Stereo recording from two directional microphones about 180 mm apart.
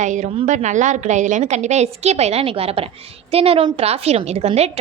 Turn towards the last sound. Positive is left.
turn(degrees=-35)  # may be behind; listen again after turning